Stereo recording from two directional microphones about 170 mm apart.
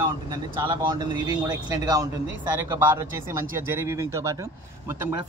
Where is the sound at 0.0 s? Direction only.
25° right (ahead or behind).